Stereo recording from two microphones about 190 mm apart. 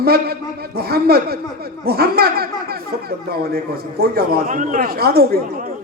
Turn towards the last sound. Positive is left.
turn(degrees=-55)  # may be behind; listen again after turning